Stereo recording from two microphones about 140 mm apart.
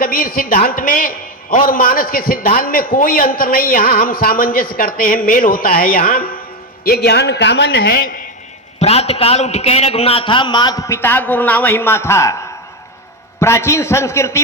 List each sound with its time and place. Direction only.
0.0 s a man's voice: 90° left
7.9 s a man's voice: 90° left
8.8 s a man's voice: 50° left (ahead or behind); by 12.4 s 20° left (ahead or behind)
13.4 s a man's voice: 20° left (ahead or behind)